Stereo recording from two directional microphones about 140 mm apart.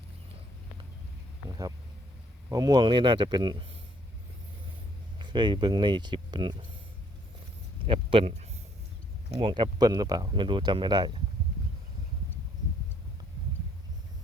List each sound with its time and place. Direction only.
2.5 s speech: 30° right (ahead or behind)
5.2 s speech: 35° right (ahead or behind)
7.9 s speech: 40° right (ahead or behind)